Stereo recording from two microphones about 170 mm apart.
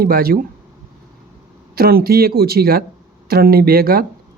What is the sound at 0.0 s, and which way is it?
Speech, 60° right (ahead or behind).